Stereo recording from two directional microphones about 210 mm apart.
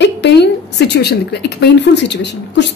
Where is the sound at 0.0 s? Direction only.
55° left (ahead or behind).